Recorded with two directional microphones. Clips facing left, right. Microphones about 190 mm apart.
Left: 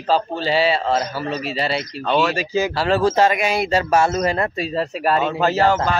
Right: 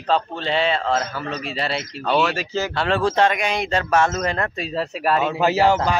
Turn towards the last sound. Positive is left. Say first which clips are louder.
# even
turn(degrees=-10)  # may be behind; listen again after turning